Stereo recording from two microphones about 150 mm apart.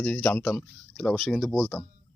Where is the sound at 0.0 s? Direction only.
5° left (ahead or behind).